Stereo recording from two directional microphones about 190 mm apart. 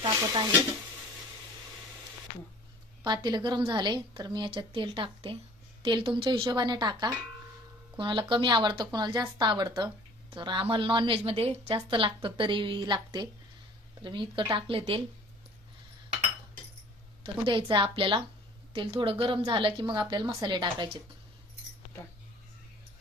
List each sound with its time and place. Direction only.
0.0 s stir: 20° right (ahead or behind)
3.2 s a woman's voice: 20° right (ahead or behind)
17.2 s speech: 25° right (ahead or behind)